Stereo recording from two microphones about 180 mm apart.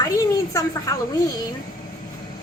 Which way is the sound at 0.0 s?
20° left (ahead or behind).